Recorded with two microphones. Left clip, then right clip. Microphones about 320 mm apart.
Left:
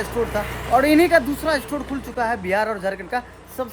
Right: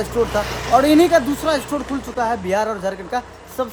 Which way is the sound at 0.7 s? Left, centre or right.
Centre.